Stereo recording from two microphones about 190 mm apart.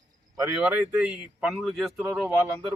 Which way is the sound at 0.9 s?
5° right (ahead or behind).